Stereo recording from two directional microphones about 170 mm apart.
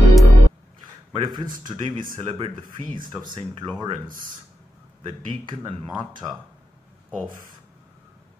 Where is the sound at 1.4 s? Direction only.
55° right (ahead or behind).